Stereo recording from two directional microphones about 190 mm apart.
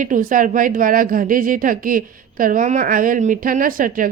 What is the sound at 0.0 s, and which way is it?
A woman's voice, 45° right (ahead or behind).